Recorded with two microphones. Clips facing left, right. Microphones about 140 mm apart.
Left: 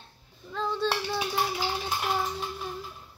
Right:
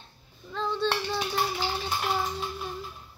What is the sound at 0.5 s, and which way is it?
Child singing, 5° left (ahead or behind).